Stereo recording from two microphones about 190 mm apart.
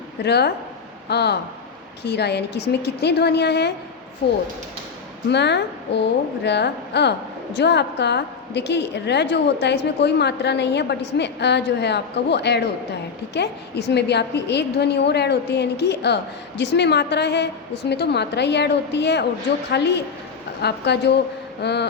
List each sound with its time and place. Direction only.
0.3 s a woman's voice: 60° left (ahead or behind)
5.3 s a woman's voice: 65° left (ahead or behind)